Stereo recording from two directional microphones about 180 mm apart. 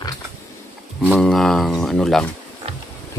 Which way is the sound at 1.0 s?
Centre (ahead or behind).